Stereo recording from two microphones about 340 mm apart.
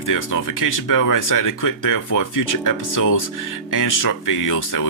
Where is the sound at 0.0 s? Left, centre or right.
Left.